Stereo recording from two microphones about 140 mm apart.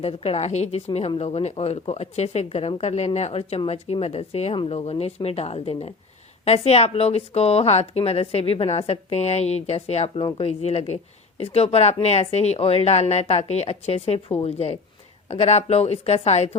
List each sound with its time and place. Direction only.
0.0 s a woman's voice: 45° left (ahead or behind)
0.9 s a woman's voice: 40° left (ahead or behind)